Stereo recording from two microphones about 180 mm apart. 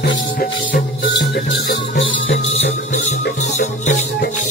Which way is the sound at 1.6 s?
65° left (ahead or behind).